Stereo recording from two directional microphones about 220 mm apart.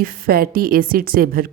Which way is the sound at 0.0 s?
40° right (ahead or behind).